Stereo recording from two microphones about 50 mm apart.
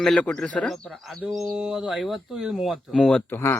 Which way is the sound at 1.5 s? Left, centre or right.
Centre.